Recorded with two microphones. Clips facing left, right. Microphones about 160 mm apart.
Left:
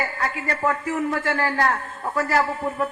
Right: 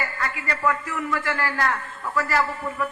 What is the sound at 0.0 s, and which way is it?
A man's voice, 55° left (ahead or behind).